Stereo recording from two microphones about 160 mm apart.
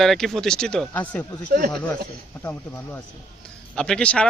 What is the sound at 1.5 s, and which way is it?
Speech, 60° right (ahead or behind).